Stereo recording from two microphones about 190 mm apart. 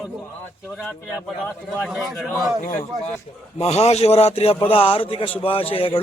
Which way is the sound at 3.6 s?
35° left (ahead or behind).